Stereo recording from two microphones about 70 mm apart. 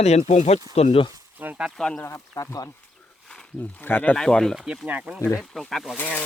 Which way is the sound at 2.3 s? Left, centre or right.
Left.